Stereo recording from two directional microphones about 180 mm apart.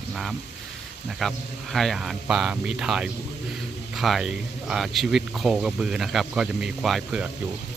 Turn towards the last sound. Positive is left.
turn(degrees=0)  # may be behind; listen again after turning